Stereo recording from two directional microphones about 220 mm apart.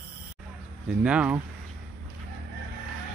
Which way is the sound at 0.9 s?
5° right (ahead or behind).